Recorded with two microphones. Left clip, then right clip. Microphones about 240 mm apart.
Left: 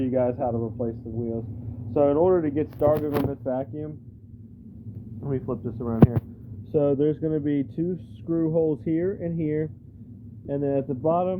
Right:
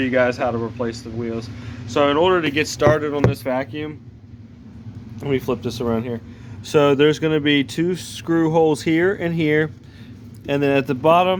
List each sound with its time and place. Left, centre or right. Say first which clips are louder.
0.0 s speech: right 6 dB; right
0.5 s speech: right 5 dB; right
0.9 s speech: right 4 dB; right
3.7 s speech: right 6 dB; centre
5.2 s speech: right 8 dB; right
6.7 s speech: right 8 dB; right